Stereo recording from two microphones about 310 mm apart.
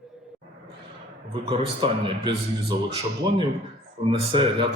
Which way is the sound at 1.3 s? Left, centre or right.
Centre.